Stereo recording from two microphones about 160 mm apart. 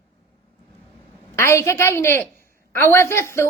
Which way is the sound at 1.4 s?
20° left (ahead or behind).